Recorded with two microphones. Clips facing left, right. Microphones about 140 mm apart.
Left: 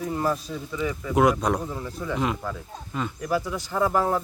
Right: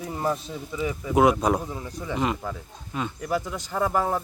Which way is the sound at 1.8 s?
15° right (ahead or behind).